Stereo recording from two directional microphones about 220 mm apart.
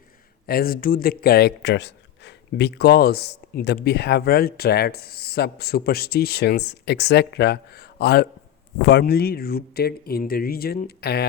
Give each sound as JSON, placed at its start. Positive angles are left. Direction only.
{"t": 0.4, "sound": "speech", "side_deg": 45}